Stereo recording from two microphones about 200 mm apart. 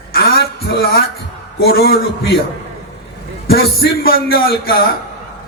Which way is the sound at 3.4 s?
50° left (ahead or behind).